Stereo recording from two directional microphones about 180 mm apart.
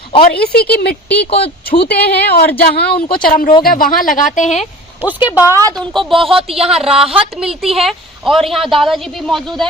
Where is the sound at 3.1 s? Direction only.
55° left (ahead or behind).